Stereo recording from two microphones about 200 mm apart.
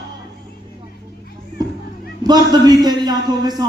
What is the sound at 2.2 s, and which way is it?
A man's voice, 20° right (ahead or behind).